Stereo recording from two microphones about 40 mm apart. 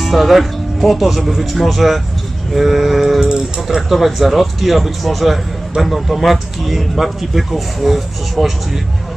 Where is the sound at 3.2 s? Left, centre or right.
Centre.